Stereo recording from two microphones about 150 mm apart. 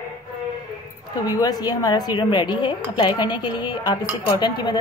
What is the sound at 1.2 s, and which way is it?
Speech, 25° left (ahead or behind).